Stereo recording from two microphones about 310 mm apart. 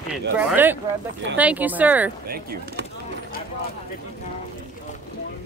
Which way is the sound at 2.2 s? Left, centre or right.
Right.